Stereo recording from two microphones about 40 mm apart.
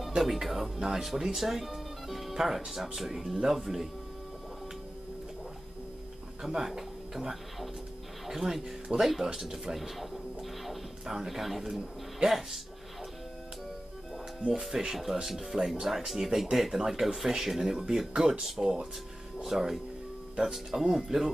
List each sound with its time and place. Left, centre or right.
0.1 s speech: centre
6.4 s speech: centre
10.6 s music: centre
11.6 s speech: centre
14.5 s speech: centre